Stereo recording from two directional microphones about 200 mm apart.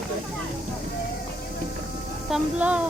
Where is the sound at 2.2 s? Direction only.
5° right (ahead or behind).